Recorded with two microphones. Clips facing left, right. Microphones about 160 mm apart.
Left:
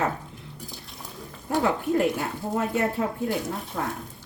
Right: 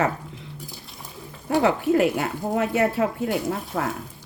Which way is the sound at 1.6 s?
80° right.